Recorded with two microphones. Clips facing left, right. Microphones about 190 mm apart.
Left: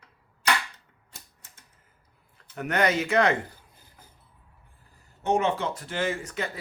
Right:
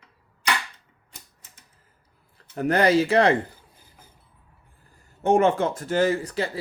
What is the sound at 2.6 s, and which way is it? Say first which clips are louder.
Speech: right 6 dB; 35° right (ahead or behind).